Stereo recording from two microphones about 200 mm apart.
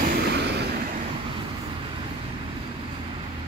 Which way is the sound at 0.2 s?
55° right (ahead or behind).